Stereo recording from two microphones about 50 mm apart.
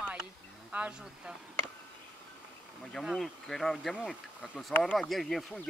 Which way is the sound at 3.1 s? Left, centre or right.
Centre.